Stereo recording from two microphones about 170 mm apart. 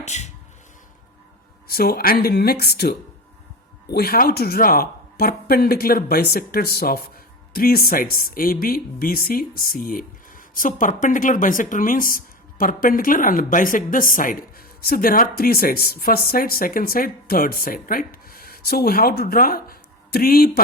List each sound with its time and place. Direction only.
0.0 s speech: 40° left (ahead or behind)
1.6 s speech: 65° left (ahead or behind)
3.9 s speech: 60° left (ahead or behind)